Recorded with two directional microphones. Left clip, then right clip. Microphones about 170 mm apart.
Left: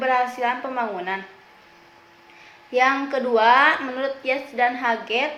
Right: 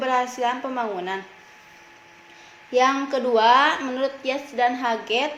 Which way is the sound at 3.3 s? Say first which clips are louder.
Left 1 dB; 60° right (ahead or behind).